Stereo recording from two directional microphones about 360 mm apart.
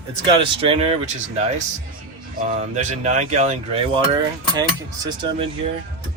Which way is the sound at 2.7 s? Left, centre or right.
Centre.